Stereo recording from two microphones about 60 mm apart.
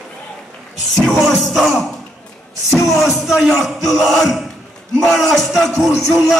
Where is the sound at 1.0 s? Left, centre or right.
Centre.